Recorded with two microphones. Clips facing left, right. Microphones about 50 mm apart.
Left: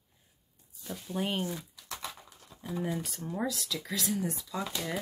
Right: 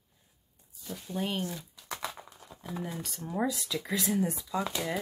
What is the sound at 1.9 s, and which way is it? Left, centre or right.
Typing, centre.